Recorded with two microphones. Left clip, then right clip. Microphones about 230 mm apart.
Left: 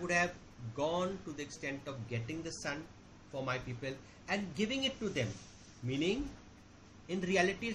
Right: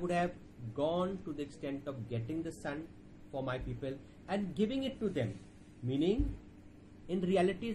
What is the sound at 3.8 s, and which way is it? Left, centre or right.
Speech, left.